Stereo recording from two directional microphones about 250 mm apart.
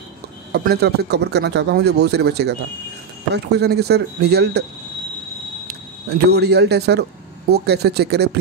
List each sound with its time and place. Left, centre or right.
0.5 s a man's voice: right
5.7 s speech: right